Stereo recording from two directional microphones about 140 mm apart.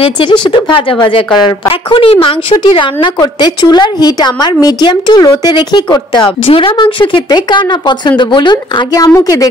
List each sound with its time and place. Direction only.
0.0 s a woman's voice: 35° left (ahead or behind)